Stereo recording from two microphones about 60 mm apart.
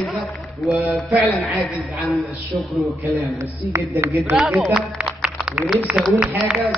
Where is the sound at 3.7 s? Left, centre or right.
Right.